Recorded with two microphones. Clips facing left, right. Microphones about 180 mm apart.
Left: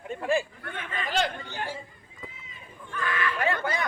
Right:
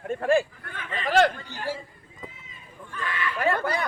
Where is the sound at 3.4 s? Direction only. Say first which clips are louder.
Right 5 dB; 40° right (ahead or behind).